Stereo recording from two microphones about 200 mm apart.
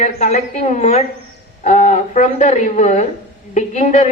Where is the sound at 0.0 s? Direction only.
35° left (ahead or behind).